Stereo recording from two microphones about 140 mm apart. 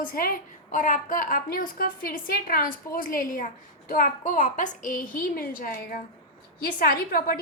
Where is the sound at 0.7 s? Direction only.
70° left (ahead or behind).